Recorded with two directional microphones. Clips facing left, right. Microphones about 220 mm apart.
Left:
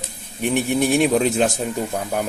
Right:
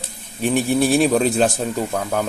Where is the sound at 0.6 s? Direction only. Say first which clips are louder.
Right 1 dB; 35° right (ahead or behind).